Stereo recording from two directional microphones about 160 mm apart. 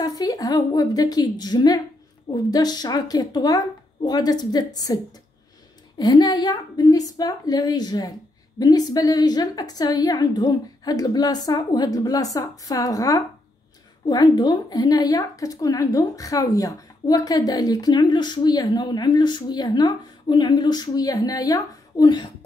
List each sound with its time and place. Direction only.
0.0 s a woman's voice: 25° left (ahead or behind)